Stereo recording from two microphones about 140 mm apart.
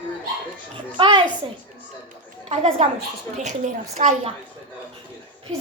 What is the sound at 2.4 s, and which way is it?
Speech, 45° right (ahead or behind).